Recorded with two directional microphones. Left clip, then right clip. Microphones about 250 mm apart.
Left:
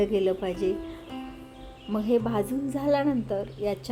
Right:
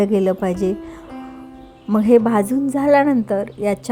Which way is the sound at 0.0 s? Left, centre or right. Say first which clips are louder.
Right 7 dB; right.